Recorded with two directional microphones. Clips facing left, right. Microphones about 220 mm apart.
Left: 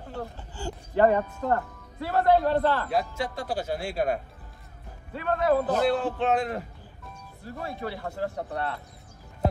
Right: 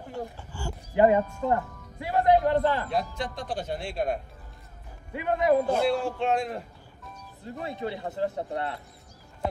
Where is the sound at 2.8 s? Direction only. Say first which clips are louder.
Left 2 dB; 5° left (ahead or behind).